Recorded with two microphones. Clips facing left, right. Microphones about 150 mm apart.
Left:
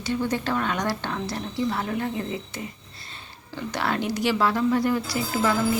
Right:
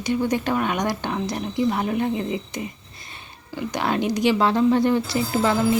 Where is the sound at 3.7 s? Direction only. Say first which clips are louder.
Right 3 dB; 15° right (ahead or behind).